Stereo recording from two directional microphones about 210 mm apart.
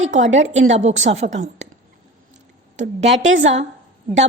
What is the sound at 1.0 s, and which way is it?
Speech, 30° right (ahead or behind).